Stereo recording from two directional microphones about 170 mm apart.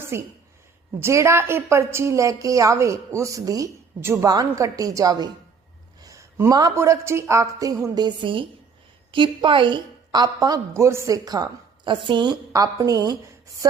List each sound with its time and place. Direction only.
0.1 s a woman's voice: 15° right (ahead or behind)